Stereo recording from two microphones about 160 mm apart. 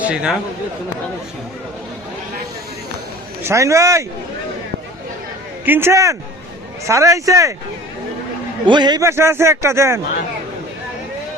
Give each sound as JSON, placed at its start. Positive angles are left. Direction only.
{"t": 0.0, "sound": "speech", "side_deg": -5}
{"t": 3.4, "sound": "speech", "side_deg": -20}
{"t": 5.6, "sound": "a man's voice", "side_deg": -15}
{"t": 8.6, "sound": "a man's voice", "side_deg": -30}